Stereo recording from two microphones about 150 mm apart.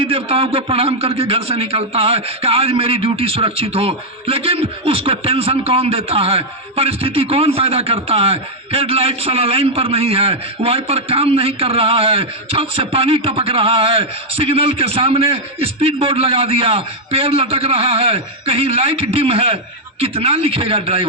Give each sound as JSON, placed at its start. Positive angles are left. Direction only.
{"t": 0.0, "sound": "a man's voice", "side_deg": -40}